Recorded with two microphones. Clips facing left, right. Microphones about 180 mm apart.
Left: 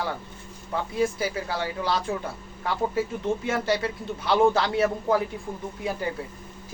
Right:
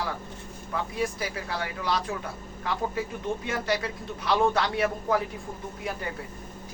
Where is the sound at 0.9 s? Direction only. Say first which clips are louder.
Left 7 dB; 30° left (ahead or behind).